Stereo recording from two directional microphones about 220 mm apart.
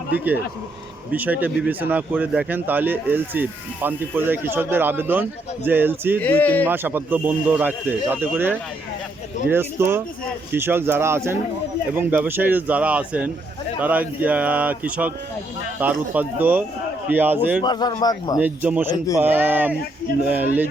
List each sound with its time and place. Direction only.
0.1 s speech: 10° right (ahead or behind)
6.2 s speech: 5° left (ahead or behind)
6.7 s speech: 10° right (ahead or behind)
17.6 s a man's voice: 20° left (ahead or behind)
18.3 s speech: 5° right (ahead or behind)
18.9 s speech: 15° left (ahead or behind)
19.2 s speech: 10° right (ahead or behind)